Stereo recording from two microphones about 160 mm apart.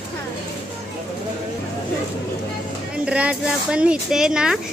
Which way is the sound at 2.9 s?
5° right (ahead or behind).